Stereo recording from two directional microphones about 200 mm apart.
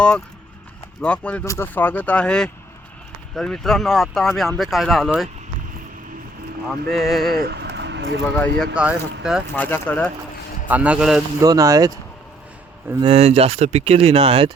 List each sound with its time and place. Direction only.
1.0 s speech: 5° left (ahead or behind)
6.9 s speech: centre (ahead or behind)
7.3 s a sound: 55° right (ahead or behind)
8.2 s speech: 5° left (ahead or behind)
9.6 s speech: 10° left (ahead or behind)
10.7 s speech: 5° right (ahead or behind)
11.3 s speech: 15° right (ahead or behind)
13.0 s speech: 30° right (ahead or behind)